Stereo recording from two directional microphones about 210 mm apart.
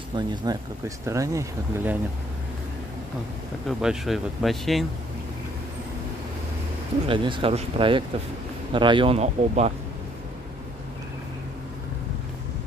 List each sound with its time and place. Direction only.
0.1 s speech: 20° right (ahead or behind)
3.6 s speech: centre (ahead or behind)
7.1 s speech: 25° right (ahead or behind)